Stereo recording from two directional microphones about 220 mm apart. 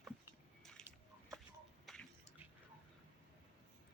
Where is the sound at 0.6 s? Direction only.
5° left (ahead or behind).